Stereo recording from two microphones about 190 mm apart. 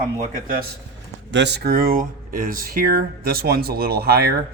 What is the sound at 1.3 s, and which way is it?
Speech, 65° right (ahead or behind).